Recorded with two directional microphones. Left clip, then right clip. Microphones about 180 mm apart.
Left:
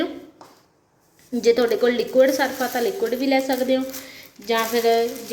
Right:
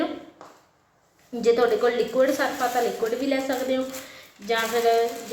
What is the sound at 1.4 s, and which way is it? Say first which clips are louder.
A woman's voice: left 2 dB; 30° left (ahead or behind).